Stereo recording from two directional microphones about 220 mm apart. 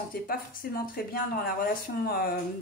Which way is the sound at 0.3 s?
40° left (ahead or behind).